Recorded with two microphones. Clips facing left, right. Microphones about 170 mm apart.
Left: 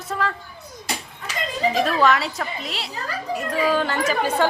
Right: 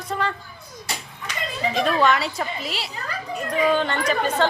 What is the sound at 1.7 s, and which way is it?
Speech, centre (ahead or behind).